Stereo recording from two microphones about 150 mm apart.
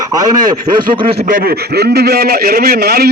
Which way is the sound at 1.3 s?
90° right.